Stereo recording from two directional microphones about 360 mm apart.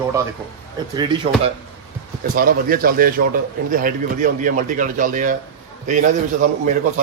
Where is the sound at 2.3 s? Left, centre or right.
Right.